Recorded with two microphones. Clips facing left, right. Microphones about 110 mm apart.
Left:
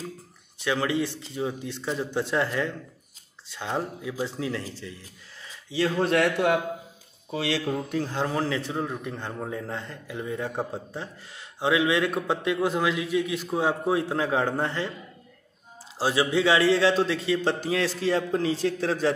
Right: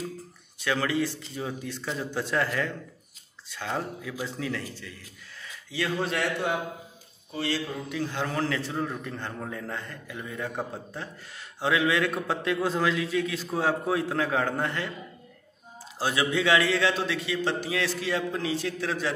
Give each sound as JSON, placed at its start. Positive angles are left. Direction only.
{"t": 0.7, "sound": "a man's voice", "side_deg": 20}
{"t": 5.4, "sound": "a sound", "side_deg": 25}
{"t": 5.9, "sound": "speech", "side_deg": 50}
{"t": 7.2, "sound": "speech", "side_deg": 90}
{"t": 7.6, "sound": "speech", "side_deg": 45}
{"t": 8.3, "sound": "a man's voice", "side_deg": 20}
{"t": 16.0, "sound": "a man's voice", "side_deg": 30}